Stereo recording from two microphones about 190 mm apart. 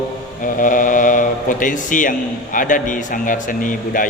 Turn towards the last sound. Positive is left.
turn(degrees=45)  # may be behind; listen again after turning